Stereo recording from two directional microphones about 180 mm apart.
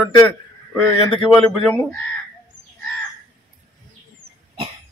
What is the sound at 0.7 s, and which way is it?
Speech, 5° left (ahead or behind).